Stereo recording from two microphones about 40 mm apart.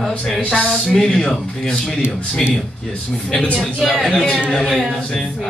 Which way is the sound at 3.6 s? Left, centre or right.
Centre.